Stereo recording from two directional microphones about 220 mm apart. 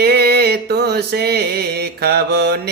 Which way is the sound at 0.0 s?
45° right (ahead or behind).